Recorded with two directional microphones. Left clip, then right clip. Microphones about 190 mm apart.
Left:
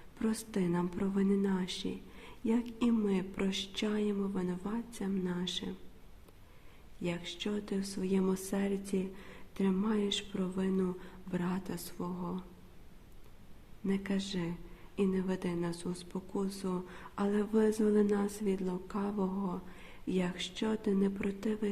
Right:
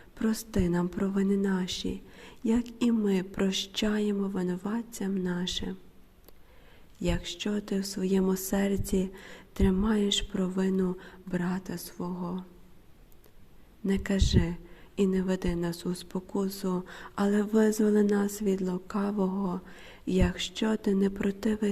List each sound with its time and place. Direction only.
0.2 s speech: 25° right (ahead or behind)
7.0 s speech: 30° right (ahead or behind)
13.8 s speech: 25° right (ahead or behind)